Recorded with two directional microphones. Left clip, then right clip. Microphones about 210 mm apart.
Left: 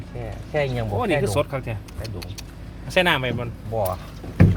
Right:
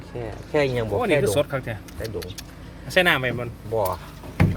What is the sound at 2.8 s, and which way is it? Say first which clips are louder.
Speech: even; 10° right (ahead or behind).